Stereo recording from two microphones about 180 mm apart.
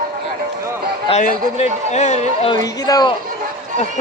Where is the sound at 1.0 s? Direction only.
35° left (ahead or behind).